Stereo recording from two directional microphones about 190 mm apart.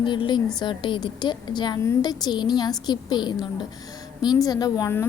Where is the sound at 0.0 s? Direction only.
25° left (ahead or behind).